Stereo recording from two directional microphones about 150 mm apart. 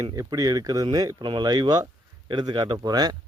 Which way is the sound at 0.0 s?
25° right (ahead or behind).